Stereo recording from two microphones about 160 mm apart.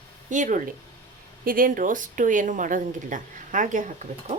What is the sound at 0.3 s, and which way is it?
Speech, 50° right (ahead or behind).